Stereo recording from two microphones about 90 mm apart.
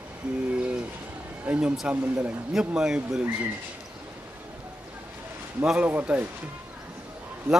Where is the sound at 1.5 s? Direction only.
15° right (ahead or behind).